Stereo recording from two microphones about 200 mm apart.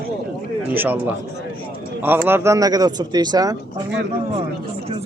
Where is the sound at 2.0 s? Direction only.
10° right (ahead or behind).